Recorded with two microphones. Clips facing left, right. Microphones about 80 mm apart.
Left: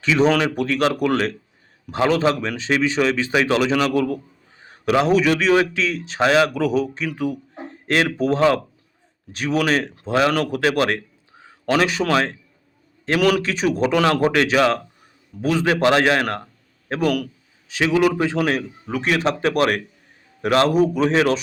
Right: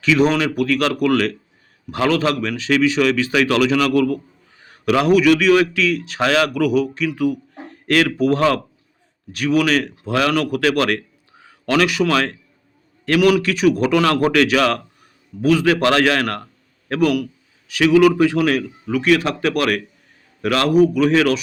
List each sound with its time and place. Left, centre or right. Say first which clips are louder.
0.0 s a man's voice: right 1 dB; left
6.1 s a man's voice: left 2 dB; left
7.2 s a sound: right 4 dB; left
8.2 s a man's voice: right 1 dB; left
13.1 s a man's voice: right 3 dB; left